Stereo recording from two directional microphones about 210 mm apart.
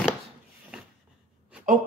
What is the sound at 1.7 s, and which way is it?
Speech, 35° right (ahead or behind).